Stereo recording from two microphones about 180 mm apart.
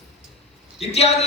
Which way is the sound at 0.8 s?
35° left (ahead or behind).